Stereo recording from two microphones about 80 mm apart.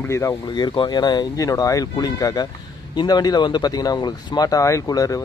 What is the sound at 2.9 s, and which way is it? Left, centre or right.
Speech, left.